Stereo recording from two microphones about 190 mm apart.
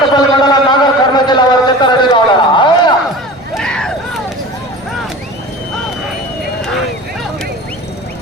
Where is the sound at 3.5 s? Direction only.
5° left (ahead or behind).